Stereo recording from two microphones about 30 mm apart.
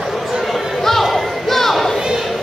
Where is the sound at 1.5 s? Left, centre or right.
Centre.